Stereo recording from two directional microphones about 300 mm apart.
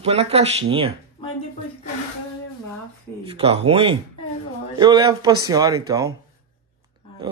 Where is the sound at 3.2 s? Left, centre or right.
Centre.